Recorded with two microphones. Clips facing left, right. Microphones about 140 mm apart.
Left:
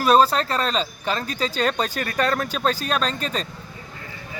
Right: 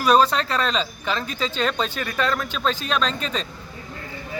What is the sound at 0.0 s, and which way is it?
Speech, 35° left (ahead or behind).